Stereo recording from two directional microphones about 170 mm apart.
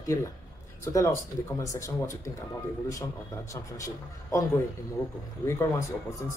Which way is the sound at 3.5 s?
20° left (ahead or behind).